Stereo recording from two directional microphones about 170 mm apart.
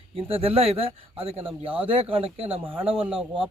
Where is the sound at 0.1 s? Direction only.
30° right (ahead or behind).